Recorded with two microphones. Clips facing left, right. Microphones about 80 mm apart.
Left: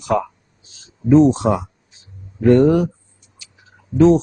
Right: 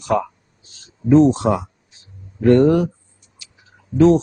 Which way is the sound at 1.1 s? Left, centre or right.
Centre.